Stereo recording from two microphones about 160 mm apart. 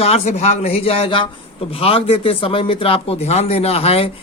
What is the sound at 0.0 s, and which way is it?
A man's voice, 40° left (ahead or behind).